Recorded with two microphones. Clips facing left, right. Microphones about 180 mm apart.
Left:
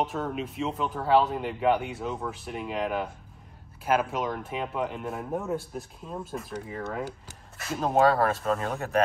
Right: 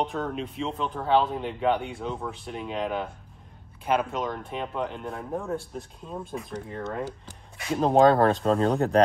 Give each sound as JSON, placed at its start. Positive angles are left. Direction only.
{"t": 0.0, "sound": "speech", "side_deg": 5}
{"t": 7.5, "sound": "a sound", "side_deg": 0}
{"t": 8.5, "sound": "speech", "side_deg": -30}